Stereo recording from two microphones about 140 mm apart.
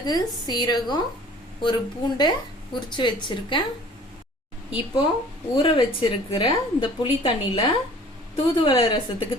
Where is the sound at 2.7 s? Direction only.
35° left (ahead or behind).